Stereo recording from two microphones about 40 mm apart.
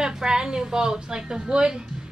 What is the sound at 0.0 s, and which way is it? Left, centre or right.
A woman's voice, centre.